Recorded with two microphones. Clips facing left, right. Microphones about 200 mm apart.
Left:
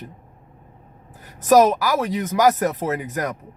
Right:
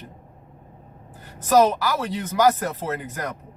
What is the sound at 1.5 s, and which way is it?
Speech, 15° left (ahead or behind).